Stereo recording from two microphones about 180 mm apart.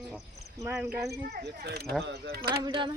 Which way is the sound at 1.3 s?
60° right (ahead or behind).